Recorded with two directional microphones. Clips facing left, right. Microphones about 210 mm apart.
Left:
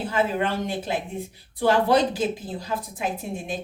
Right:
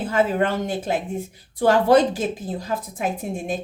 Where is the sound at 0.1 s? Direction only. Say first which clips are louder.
Right 5 dB; 45° right (ahead or behind).